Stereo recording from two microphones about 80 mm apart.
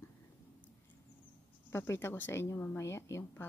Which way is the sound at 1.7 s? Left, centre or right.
Left.